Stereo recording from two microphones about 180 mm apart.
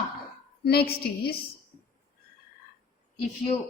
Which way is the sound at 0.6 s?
60° left (ahead or behind).